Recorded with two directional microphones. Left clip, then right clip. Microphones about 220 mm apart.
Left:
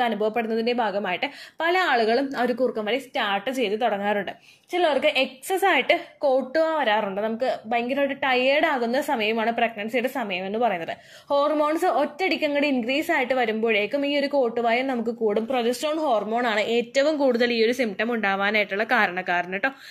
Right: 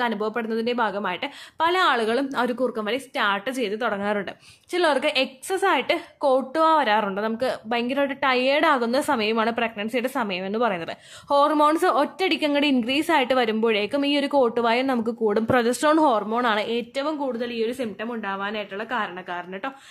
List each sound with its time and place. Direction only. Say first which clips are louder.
0.0 s a woman's voice: left 2 dB; 10° right (ahead or behind)
16.4 s a woman's voice: left 1 dB; 5° right (ahead or behind)
17.3 s a woman's voice: left 6 dB; 15° left (ahead or behind)